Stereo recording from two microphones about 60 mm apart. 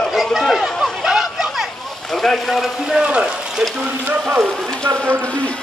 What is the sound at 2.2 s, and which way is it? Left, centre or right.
Speech, centre.